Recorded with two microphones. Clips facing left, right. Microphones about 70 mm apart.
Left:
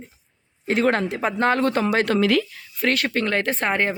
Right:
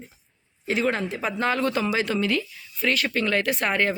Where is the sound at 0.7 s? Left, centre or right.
Left.